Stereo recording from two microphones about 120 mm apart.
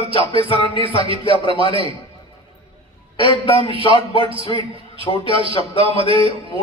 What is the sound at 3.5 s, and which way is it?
A man's voice, 50° right (ahead or behind).